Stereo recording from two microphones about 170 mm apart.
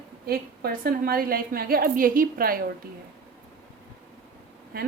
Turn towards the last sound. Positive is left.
turn(degrees=-60)  # may be behind; listen again after turning